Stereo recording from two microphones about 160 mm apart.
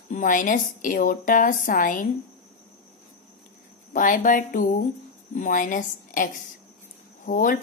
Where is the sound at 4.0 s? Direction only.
55° left (ahead or behind).